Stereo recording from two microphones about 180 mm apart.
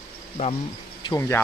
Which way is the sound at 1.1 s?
15° left (ahead or behind).